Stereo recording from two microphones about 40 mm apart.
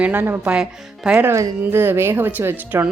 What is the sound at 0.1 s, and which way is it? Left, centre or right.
Speech, right.